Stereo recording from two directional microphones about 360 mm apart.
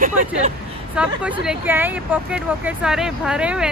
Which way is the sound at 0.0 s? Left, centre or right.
Right.